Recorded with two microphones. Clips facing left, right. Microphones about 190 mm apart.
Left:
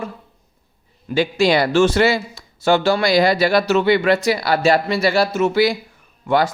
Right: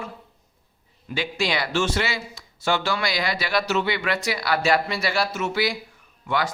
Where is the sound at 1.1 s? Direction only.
40° left (ahead or behind).